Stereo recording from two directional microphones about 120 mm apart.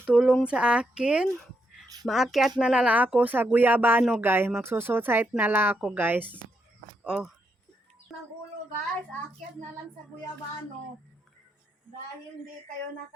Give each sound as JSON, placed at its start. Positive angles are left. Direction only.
{"t": 0.1, "sound": "speech", "side_deg": -5}
{"t": 1.4, "sound": "a sound", "side_deg": 0}
{"t": 2.0, "sound": "speech", "side_deg": 0}